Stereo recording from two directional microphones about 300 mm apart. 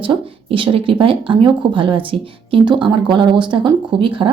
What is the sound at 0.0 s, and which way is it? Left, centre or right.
Speech, centre.